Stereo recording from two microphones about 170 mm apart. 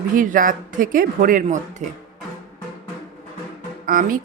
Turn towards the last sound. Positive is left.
turn(degrees=-55)  # may be behind; listen again after turning